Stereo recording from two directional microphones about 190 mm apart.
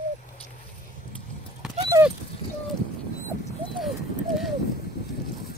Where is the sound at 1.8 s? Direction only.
15° right (ahead or behind).